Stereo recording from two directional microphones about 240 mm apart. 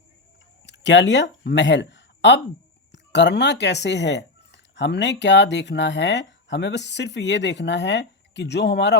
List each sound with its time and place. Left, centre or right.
0.6 s speech: left